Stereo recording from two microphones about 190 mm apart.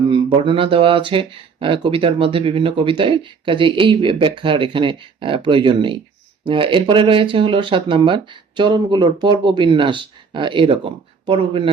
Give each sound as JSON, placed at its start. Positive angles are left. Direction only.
{"t": 0.1, "sound": "speech", "side_deg": -25}